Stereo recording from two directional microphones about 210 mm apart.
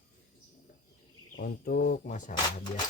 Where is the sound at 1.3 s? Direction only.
45° left (ahead or behind).